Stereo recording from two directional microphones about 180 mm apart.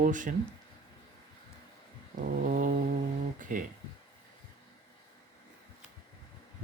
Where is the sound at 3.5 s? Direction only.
45° right (ahead or behind).